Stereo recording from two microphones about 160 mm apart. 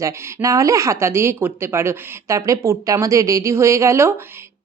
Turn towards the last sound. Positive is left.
turn(degrees=-15)  # may be behind; listen again after turning